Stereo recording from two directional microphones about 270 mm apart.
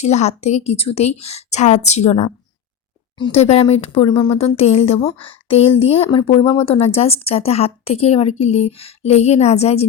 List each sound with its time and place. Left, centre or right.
0.0 s a woman's voice: left